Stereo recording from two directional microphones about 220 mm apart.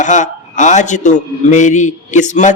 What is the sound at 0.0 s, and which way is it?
A man's voice, 35° left (ahead or behind).